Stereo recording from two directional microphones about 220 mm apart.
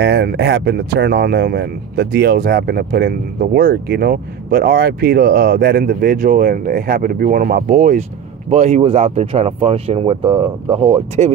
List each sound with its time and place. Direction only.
0.0 s speech: 50° right (ahead or behind); by 11.3 s 30° right (ahead or behind)